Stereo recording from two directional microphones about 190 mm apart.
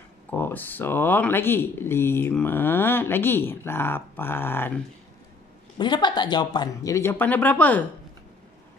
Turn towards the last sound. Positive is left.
turn(degrees=10)  # may be behind; listen again after turning